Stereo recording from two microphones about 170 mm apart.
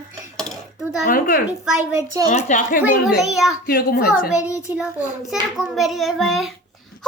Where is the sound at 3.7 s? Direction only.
65° left (ahead or behind).